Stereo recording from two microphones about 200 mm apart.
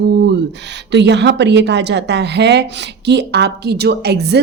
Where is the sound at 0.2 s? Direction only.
60° right (ahead or behind).